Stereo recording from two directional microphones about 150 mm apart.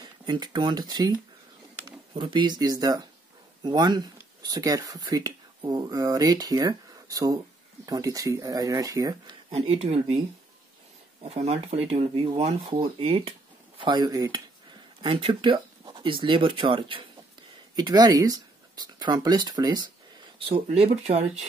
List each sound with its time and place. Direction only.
0.0 s speech: 30° right (ahead or behind)
9.5 s speech: 40° right (ahead or behind)
11.2 s speech: 45° right (ahead or behind); by 19.9 s 25° right (ahead or behind)
20.3 s speech: 40° right (ahead or behind)